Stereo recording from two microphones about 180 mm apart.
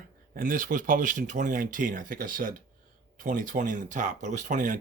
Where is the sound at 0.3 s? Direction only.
50° right (ahead or behind).